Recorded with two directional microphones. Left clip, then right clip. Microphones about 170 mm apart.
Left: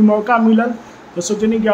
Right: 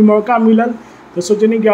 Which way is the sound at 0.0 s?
10° right (ahead or behind).